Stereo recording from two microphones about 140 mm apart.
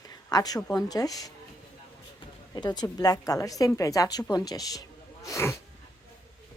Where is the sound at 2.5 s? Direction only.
30° left (ahead or behind).